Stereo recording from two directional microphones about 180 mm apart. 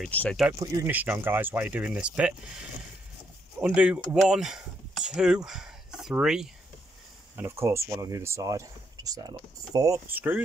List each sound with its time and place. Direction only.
0.0 s speech: 5° left (ahead or behind)
0.6 s speech: 20° right (ahead or behind)
0.9 s speech: 10° right (ahead or behind)
3.6 s speech: 5° right (ahead or behind)
7.3 s speech: 15° right (ahead or behind)